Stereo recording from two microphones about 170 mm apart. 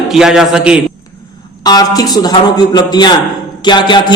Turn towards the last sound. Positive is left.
turn(degrees=25)  # may be behind; listen again after turning